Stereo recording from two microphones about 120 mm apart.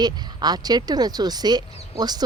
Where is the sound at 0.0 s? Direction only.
35° right (ahead or behind).